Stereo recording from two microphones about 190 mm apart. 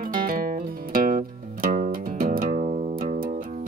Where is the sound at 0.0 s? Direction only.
50° right (ahead or behind).